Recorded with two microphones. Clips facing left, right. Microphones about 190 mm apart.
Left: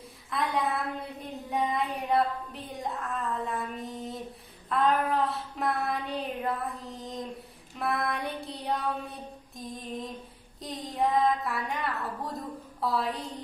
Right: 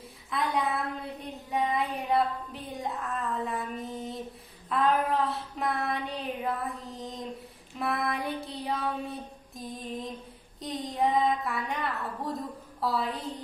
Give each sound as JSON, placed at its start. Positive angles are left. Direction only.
{"t": 0.3, "sound": "a woman's voice", "side_deg": 0}